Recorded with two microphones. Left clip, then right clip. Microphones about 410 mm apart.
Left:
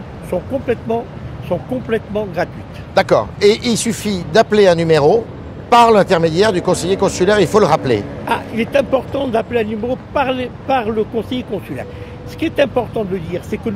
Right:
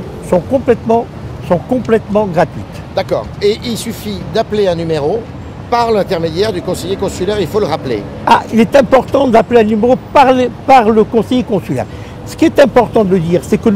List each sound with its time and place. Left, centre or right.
0.3 s speech: right
2.9 s speech: left
8.3 s speech: right